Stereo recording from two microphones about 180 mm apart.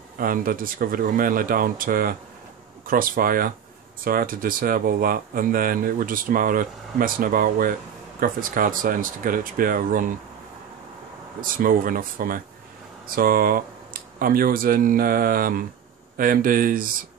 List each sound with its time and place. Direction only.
0.2 s speech: 50° right (ahead or behind)
11.4 s speech: 50° right (ahead or behind)